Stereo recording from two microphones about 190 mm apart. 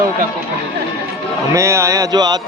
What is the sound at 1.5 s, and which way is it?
Music, 15° right (ahead or behind).